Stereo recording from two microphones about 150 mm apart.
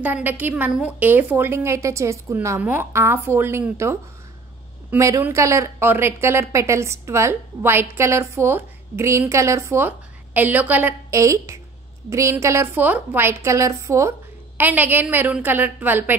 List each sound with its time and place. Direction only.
0.0 s a woman's voice: 10° right (ahead or behind)